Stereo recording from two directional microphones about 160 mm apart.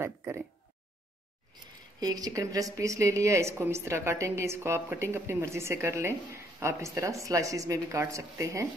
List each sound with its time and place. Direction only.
0.0 s speech: 15° right (ahead or behind)
1.5 s speech: 25° right (ahead or behind)